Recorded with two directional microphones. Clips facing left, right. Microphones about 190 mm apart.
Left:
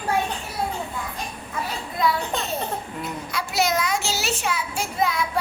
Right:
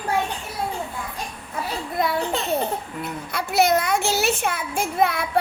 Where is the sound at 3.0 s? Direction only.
60° right (ahead or behind).